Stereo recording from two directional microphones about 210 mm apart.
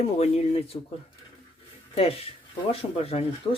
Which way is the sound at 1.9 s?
25° left (ahead or behind).